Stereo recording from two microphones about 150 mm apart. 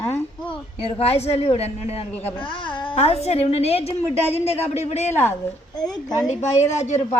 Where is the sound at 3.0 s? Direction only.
45° left (ahead or behind).